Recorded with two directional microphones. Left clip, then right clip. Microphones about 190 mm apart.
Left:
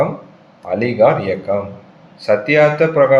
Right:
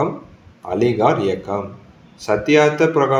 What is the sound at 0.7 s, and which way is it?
Speech, 35° right (ahead or behind).